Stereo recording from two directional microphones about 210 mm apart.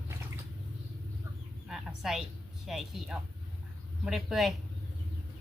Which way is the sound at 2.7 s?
Centre (ahead or behind).